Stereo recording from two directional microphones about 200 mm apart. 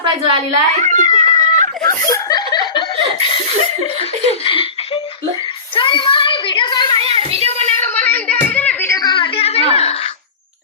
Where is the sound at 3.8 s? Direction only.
30° left (ahead or behind).